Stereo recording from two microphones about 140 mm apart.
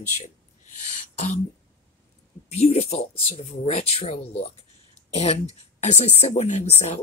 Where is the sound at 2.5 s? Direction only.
45° left (ahead or behind).